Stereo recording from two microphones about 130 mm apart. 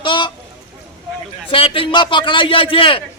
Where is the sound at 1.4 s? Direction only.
45° left (ahead or behind).